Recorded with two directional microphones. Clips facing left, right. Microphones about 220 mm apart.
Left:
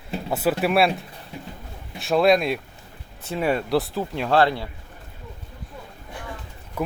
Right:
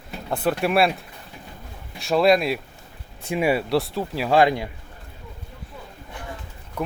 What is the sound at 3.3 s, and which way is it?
Speech, 10° right (ahead or behind).